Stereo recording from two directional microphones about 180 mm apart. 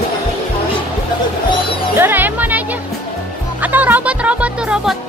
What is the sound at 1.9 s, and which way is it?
Music, 10° right (ahead or behind).